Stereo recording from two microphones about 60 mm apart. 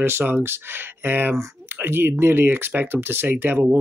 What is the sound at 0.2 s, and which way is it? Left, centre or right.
Speech, right.